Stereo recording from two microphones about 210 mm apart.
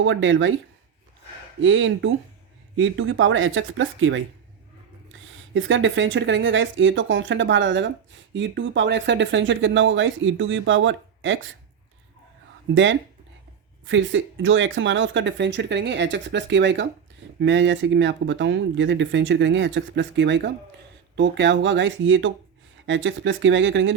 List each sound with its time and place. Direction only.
0.0 s speech: 65° right (ahead or behind)
1.6 s speech: 65° right (ahead or behind)
5.5 s speech: 65° right (ahead or behind)
12.7 s speech: 65° right (ahead or behind)